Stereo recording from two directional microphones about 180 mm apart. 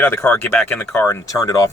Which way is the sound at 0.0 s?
10° left (ahead or behind).